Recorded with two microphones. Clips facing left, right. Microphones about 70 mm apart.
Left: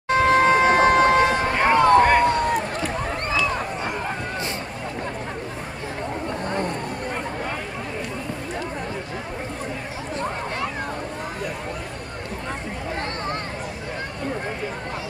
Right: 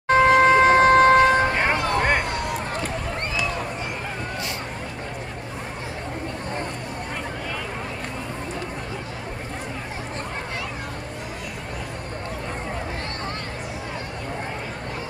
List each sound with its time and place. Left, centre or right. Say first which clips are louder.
0.1 s vehicle: right 2 dB; right
1.6 s music: left 7 dB; left